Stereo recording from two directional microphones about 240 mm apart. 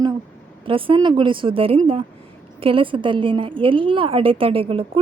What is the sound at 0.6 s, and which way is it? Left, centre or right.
A woman's voice, right.